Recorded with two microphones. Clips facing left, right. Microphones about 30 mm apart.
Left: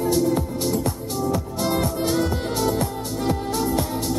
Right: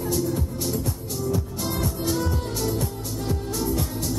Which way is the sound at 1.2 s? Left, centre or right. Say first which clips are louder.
Left 4 dB; left.